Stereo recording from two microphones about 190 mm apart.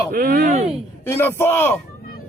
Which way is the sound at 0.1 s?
50° right (ahead or behind).